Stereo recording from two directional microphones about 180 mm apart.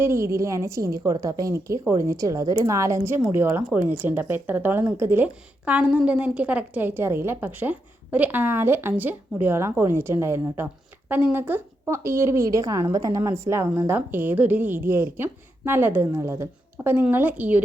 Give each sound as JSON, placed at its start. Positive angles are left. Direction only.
{"t": 0.0, "sound": "speech", "side_deg": -15}